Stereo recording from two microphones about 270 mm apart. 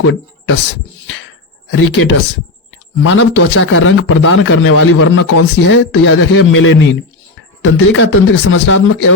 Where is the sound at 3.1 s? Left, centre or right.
Left.